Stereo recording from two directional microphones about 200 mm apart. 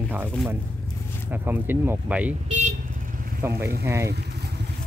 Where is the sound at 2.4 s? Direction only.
40° right (ahead or behind).